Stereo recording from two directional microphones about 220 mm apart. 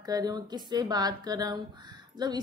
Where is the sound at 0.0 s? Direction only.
15° right (ahead or behind).